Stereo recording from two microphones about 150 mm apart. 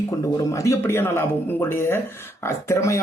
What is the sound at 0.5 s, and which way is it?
Speech, 20° left (ahead or behind).